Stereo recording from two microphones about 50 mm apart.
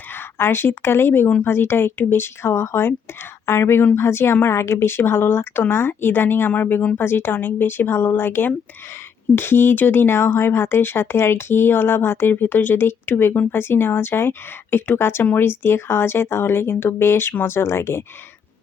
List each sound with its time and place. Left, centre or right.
0.1 s speech: left